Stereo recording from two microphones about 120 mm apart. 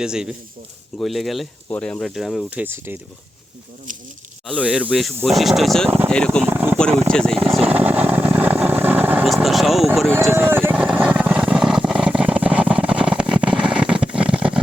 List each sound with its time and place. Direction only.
0.0 s speech: 5° right (ahead or behind)
2.5 s speech: 15° right (ahead or behind)
4.5 s speech: 10° right (ahead or behind); by 6.4 s 5° left (ahead or behind)
6.4 s speech: 15° right (ahead or behind)
7.1 s speech: 5° left (ahead or behind)
7.7 s vehicle: 15° right (ahead or behind)
9.2 s vehicle: centre (ahead or behind)
10.3 s vehicle: 20° right (ahead or behind)